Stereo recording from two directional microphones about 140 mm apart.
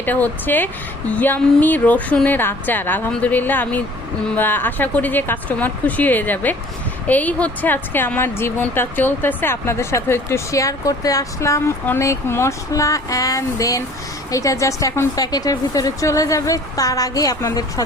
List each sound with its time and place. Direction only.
0.0 s a woman's voice: 15° left (ahead or behind)